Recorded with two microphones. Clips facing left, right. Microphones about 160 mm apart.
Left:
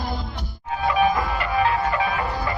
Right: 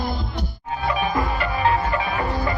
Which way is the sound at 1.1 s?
35° right (ahead or behind).